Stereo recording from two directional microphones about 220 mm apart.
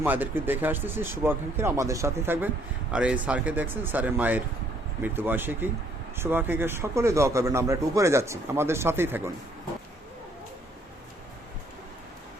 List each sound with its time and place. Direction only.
0.0 s a man's voice: 10° right (ahead or behind)